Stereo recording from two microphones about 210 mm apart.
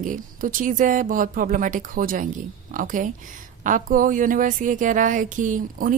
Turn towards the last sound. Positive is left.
turn(degrees=-40)  # may be behind; listen again after turning